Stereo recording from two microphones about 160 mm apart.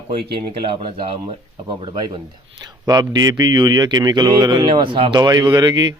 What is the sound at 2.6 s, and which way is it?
Speech, 25° right (ahead or behind).